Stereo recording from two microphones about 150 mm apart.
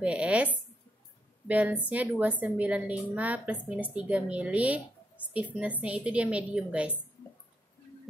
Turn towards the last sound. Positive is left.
turn(degrees=-5)  # may be behind; listen again after turning